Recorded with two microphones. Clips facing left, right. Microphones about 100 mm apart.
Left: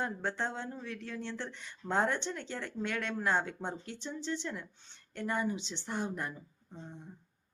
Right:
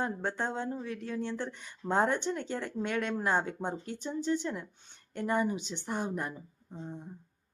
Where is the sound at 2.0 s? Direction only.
15° right (ahead or behind).